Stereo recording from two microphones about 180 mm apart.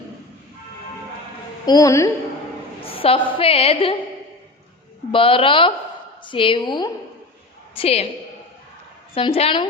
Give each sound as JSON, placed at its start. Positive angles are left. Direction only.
{"t": 1.6, "sound": "a woman's voice", "side_deg": 20}
{"t": 2.8, "sound": "a woman's voice", "side_deg": 30}
{"t": 5.1, "sound": "a woman's voice", "side_deg": 30}
{"t": 9.1, "sound": "a woman's voice", "side_deg": 30}